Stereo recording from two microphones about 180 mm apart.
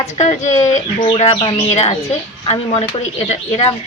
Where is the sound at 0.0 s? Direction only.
40° left (ahead or behind).